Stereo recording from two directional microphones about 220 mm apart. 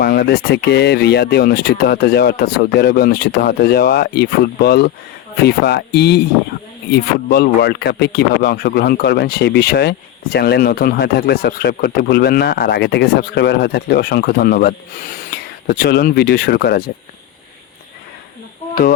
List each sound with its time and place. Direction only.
0.0 s speech: 45° left (ahead or behind)
18.7 s speech: 40° left (ahead or behind)